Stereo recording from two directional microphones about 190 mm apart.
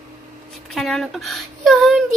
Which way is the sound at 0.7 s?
Centre (ahead or behind).